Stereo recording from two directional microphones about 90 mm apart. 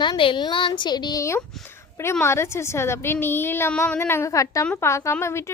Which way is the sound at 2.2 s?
30° left (ahead or behind).